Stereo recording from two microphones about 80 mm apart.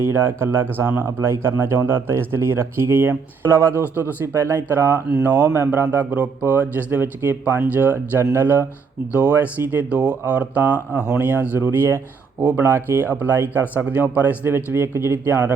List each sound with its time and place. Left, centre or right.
0.0 s speech: right
8.2 s speech: right
9.1 s speech: centre